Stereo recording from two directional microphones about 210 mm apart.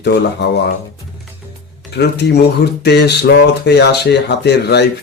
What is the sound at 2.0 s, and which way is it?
Speech, 50° left (ahead or behind).